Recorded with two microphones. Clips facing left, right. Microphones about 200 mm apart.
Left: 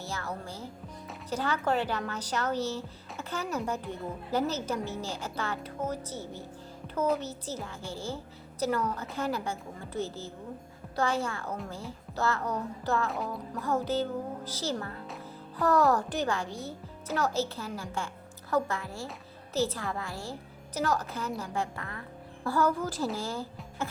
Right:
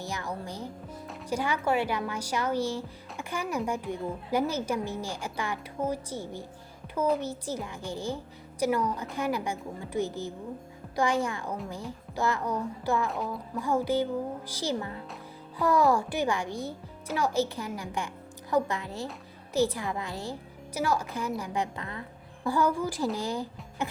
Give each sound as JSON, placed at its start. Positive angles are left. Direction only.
{"t": 0.0, "sound": "a woman's voice", "side_deg": -15}
{"t": 6.8, "sound": "music", "side_deg": -10}
{"t": 7.2, "sound": "a woman's voice", "side_deg": -15}
{"t": 13.1, "sound": "speech", "side_deg": 0}
{"t": 13.6, "sound": "a woman's voice", "side_deg": -10}